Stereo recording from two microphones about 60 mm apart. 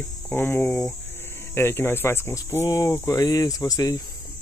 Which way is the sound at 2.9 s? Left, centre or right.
Left.